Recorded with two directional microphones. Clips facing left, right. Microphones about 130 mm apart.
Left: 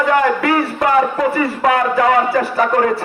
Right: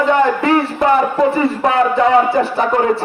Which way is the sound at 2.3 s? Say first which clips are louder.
Right 1 dB; 25° right (ahead or behind).